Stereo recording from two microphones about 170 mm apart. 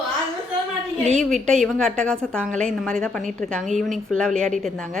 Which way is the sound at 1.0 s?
45° right (ahead or behind).